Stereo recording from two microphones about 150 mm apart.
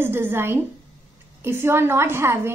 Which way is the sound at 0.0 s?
15° right (ahead or behind).